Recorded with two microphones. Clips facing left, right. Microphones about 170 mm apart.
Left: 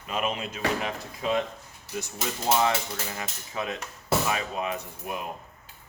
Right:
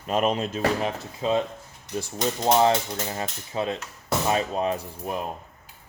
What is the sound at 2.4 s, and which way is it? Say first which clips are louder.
Cutlery: right 5 dB; 30° right (ahead or behind).